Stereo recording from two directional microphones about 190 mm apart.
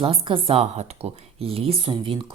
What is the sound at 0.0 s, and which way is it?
Speech, 30° right (ahead or behind).